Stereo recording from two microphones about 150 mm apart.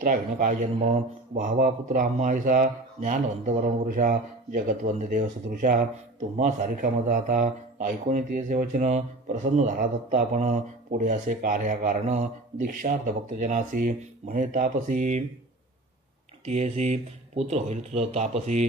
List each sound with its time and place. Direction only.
0.0 s speech: 60° right (ahead or behind)
8.8 s speech: 50° right (ahead or behind)
16.4 s speech: 45° right (ahead or behind)